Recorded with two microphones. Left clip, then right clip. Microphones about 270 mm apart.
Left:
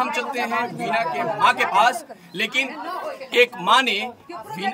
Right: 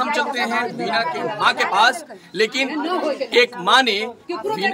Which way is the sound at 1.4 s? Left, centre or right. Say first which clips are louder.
Right 1 dB; centre.